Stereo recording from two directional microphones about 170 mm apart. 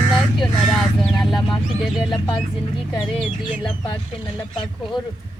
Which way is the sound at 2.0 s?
25° left (ahead or behind).